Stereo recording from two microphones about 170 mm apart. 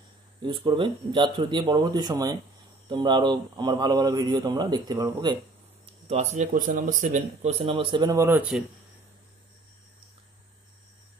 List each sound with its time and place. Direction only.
0.4 s a man's voice: 30° right (ahead or behind)
5.9 s speech: 40° right (ahead or behind)
8.2 s speech: 10° right (ahead or behind)